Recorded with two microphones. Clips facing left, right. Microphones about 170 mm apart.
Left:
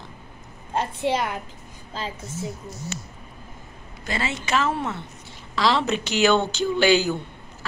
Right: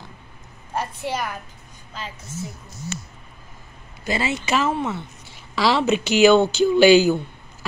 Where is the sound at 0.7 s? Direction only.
25° left (ahead or behind).